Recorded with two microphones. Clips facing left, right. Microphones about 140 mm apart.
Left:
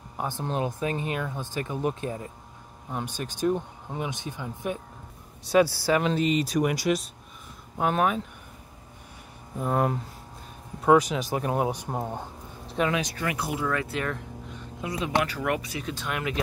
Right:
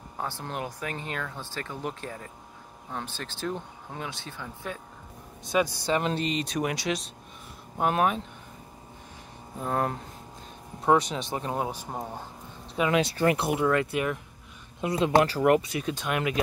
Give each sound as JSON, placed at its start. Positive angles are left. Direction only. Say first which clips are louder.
{"t": 0.2, "sound": "speech", "louder": "left 5 dB", "side_deg": 20}
{"t": 5.7, "sound": "speech", "louder": "left 3 dB", "side_deg": -20}
{"t": 5.9, "sound": "speech", "louder": "left 4 dB", "side_deg": 5}
{"t": 9.6, "sound": "speech", "louder": "left 3 dB", "side_deg": 5}
{"t": 12.6, "sound": "a sound", "louder": "left 1 dB", "side_deg": -5}
{"t": 13.0, "sound": "speech", "louder": "right 6 dB", "side_deg": -30}
{"t": 13.5, "sound": "speech", "louder": "right 4 dB", "side_deg": -20}
{"t": 14.8, "sound": "speech", "louder": "right 5 dB", "side_deg": -30}